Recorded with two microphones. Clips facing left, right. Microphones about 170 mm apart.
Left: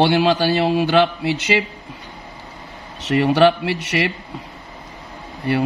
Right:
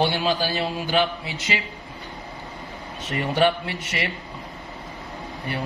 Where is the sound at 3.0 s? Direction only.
80° left.